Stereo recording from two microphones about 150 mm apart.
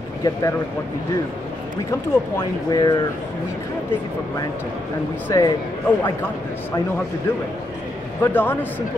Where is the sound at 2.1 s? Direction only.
20° left (ahead or behind).